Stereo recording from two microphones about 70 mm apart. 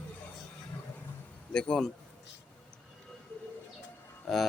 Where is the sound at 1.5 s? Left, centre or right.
Centre.